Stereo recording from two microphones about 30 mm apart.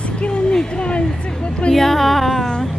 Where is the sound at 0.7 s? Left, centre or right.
Left.